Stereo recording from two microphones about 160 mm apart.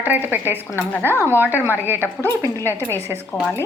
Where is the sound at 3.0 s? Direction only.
15° right (ahead or behind).